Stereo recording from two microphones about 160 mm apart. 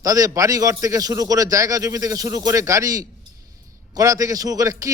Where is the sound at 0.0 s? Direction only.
20° right (ahead or behind).